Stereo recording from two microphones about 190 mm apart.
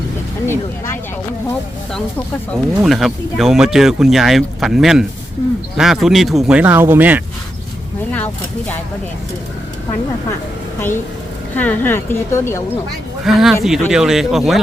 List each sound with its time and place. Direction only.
0.4 s music: 15° left (ahead or behind)
2.5 s speech: centre (ahead or behind)
8.1 s a woman's voice: 10° left (ahead or behind)
11.5 s a woman's voice: 10° left (ahead or behind)
13.2 s speech: centre (ahead or behind)